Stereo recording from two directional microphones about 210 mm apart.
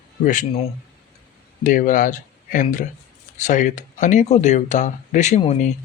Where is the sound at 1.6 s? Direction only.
40° left (ahead or behind).